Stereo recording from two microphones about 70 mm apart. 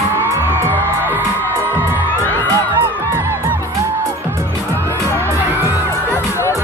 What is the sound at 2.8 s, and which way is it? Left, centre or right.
Music, right.